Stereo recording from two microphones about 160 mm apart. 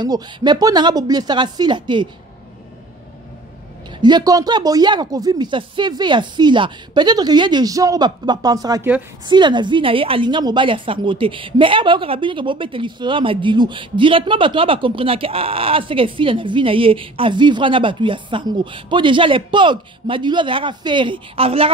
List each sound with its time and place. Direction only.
0.0 s speech: 25° right (ahead or behind)
4.0 s a woman's voice: 25° right (ahead or behind)